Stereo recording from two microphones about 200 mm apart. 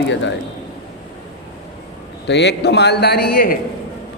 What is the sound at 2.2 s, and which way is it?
A man's voice, 60° left (ahead or behind).